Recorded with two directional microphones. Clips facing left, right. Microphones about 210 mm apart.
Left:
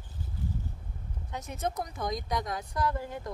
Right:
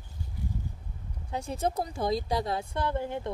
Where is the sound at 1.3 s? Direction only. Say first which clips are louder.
Right 4 dB; 30° right (ahead or behind).